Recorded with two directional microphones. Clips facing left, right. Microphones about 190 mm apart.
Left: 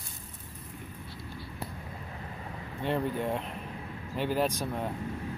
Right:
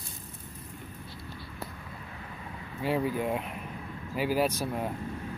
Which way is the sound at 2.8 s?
5° right (ahead or behind).